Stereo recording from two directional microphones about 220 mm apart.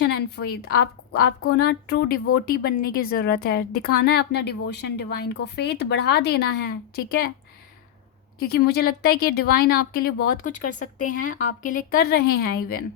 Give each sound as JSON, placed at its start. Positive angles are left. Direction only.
{"t": 0.0, "sound": "a woman's voice", "side_deg": 45}
{"t": 8.4, "sound": "a woman's voice", "side_deg": 45}